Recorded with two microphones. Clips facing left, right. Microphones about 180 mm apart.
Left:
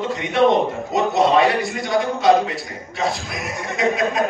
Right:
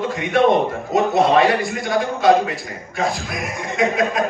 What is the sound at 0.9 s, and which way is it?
A man's voice, 55° right (ahead or behind).